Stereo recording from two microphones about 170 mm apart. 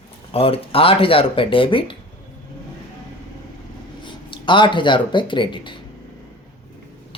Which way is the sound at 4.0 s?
30° left (ahead or behind).